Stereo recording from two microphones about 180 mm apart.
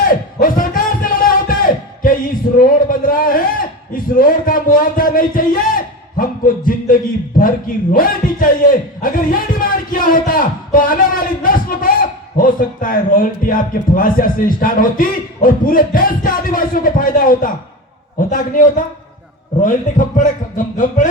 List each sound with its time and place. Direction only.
0.0 s music: 50° left (ahead or behind)
2.6 s a sound: 50° left (ahead or behind)
12.4 s speech: 50° left (ahead or behind)